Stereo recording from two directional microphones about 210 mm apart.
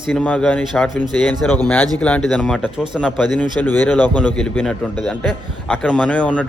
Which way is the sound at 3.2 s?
20° right (ahead or behind).